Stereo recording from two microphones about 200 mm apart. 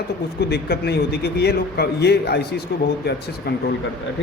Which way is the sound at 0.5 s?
50° left (ahead or behind).